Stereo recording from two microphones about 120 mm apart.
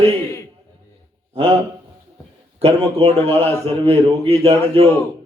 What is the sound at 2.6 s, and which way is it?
A man's voice, 55° right (ahead or behind).